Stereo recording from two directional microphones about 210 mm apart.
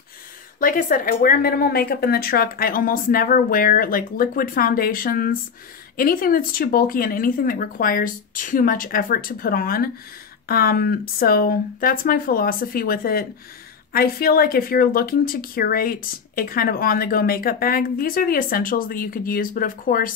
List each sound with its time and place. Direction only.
0.6 s speech: 40° left (ahead or behind)